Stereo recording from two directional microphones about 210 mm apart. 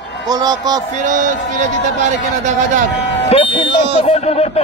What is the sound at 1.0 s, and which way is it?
A man's voice, 35° right (ahead or behind).